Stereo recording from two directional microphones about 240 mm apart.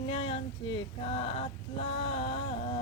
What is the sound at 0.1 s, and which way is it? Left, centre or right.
Female singing, left.